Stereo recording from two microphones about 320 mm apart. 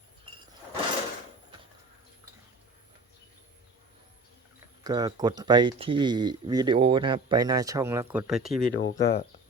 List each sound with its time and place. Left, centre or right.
4.8 s speech: centre
8.7 s speech: left